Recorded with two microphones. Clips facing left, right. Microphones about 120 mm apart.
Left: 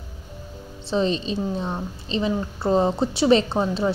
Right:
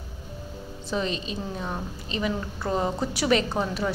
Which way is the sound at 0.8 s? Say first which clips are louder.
Left 6 dB; 30° left (ahead or behind).